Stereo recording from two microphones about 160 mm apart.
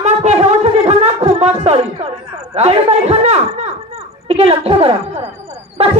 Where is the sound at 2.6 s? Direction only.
40° right (ahead or behind).